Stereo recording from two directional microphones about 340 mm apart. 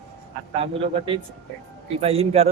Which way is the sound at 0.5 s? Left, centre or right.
Centre.